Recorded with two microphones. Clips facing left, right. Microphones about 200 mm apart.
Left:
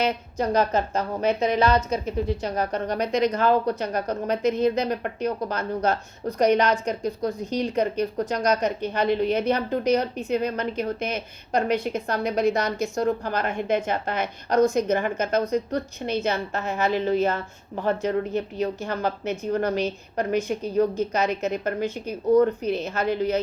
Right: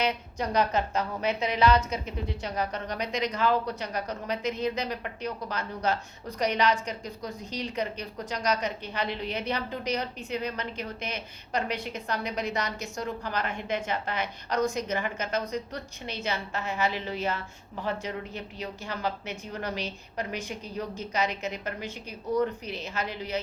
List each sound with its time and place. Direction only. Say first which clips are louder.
0.5 s a woman's voice: left 3 dB; 45° left (ahead or behind)